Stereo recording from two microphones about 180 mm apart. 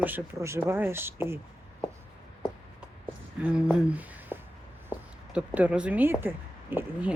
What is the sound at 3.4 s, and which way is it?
Speech, 5° right (ahead or behind).